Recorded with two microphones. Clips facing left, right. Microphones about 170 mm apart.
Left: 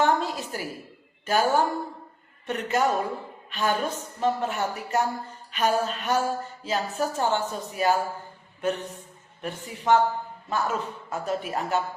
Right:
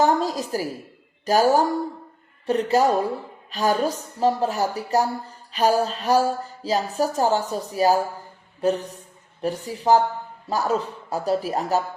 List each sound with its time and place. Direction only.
0.0 s a woman's voice: 40° right (ahead or behind)